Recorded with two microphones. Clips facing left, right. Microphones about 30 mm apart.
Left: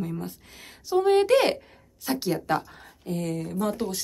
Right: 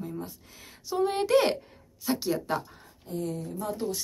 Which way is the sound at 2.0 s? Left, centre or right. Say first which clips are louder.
Left 1 dB; centre.